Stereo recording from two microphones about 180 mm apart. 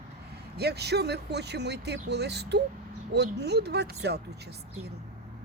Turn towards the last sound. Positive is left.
turn(degrees=-70)  # may be behind; listen again after turning